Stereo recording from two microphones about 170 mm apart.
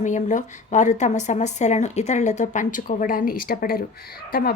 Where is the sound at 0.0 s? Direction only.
45° left (ahead or behind).